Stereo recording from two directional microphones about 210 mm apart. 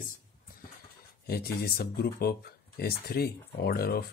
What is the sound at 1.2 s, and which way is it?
Speech, 45° left (ahead or behind).